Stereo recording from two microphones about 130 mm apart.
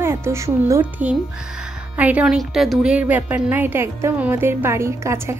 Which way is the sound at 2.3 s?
Centre (ahead or behind).